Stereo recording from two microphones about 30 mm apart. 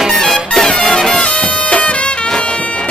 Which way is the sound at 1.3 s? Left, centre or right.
Left.